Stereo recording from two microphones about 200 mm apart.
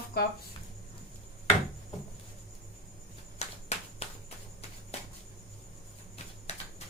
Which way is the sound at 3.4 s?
35° left (ahead or behind).